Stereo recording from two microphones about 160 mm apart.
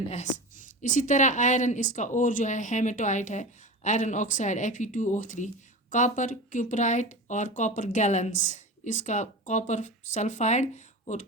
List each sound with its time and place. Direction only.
0.1 s speech: 50° left (ahead or behind)